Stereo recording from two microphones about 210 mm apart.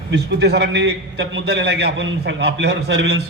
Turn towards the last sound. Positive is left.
turn(degrees=-55)  # may be behind; listen again after turning